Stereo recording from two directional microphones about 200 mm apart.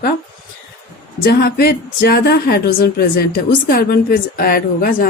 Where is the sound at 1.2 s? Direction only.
50° left (ahead or behind).